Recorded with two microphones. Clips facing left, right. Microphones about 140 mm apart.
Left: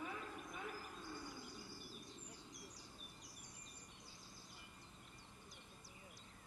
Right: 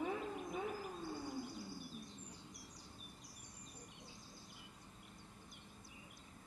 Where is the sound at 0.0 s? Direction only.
30° right (ahead or behind).